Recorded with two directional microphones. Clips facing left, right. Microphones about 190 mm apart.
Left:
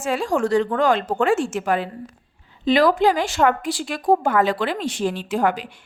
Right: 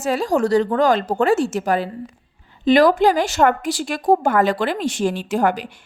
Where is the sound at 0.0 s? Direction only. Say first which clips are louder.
Right 3 dB; 40° right (ahead or behind).